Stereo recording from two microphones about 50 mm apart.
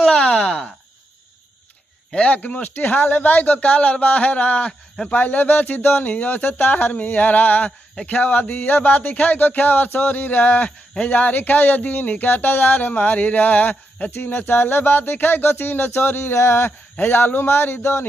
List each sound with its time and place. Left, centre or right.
0.1 s groan: centre
2.1 s speech: left
2.4 s speech: left